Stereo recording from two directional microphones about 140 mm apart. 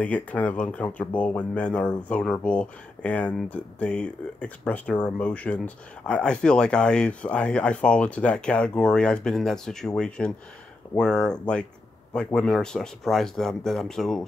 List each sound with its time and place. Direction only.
0.0 s speech: 10° left (ahead or behind)